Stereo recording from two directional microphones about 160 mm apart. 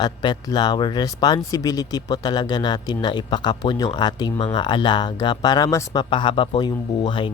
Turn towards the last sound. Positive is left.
turn(degrees=30)  # may be behind; listen again after turning